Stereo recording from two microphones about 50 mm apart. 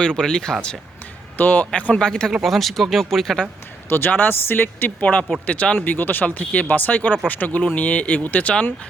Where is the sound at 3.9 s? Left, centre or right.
Left.